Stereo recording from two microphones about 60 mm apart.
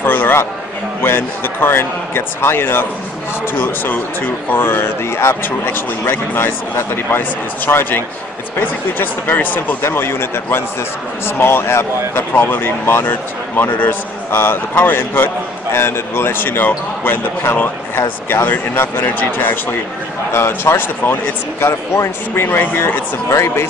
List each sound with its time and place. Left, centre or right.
0.0 s a sound: left
1.0 s a man's voice: left
9.8 s a man's voice: left
23.3 s a man's voice: left